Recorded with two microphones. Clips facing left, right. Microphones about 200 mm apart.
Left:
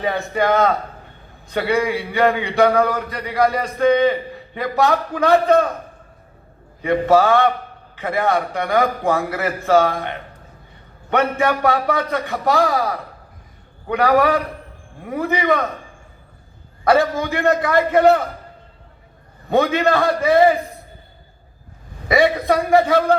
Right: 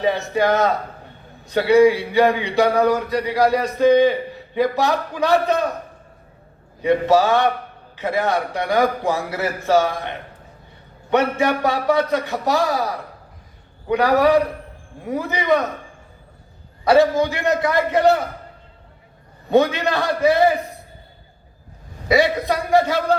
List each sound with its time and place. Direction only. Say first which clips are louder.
0.0 s a man's voice: right 1 dB; 55° left (ahead or behind)
6.8 s a man's voice: left 1 dB; 55° left (ahead or behind)
11.1 s a man's voice: even; 55° left (ahead or behind)
13.9 s a man's voice: right 1 dB; 55° left (ahead or behind)
16.8 s a man's voice: right 2 dB; 55° left (ahead or behind)
19.5 s a man's voice: even; 55° left (ahead or behind)
22.1 s a man's voice: left 2 dB; 55° left (ahead or behind)